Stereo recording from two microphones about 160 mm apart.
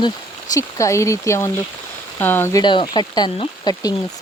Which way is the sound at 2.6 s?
30° left (ahead or behind).